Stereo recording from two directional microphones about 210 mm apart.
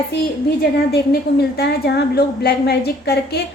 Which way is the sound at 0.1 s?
55° left (ahead or behind).